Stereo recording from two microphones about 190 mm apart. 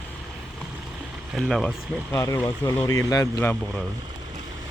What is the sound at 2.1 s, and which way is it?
Speech, 15° left (ahead or behind).